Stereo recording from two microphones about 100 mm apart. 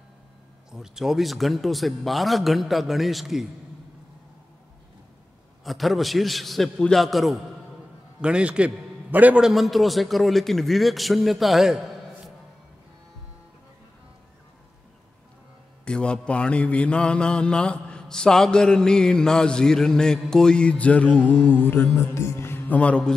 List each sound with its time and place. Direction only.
0.7 s speech: 5° right (ahead or behind)
5.6 s a man's voice: centre (ahead or behind)
9.4 s speech: centre (ahead or behind)
15.8 s mantra: 10° left (ahead or behind)